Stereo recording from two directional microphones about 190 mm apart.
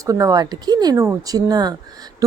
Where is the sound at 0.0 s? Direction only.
20° right (ahead or behind).